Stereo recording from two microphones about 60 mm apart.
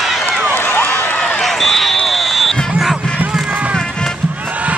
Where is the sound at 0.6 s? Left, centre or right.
Left.